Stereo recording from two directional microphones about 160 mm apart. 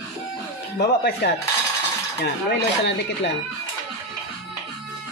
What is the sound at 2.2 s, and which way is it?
Speech, 90° left.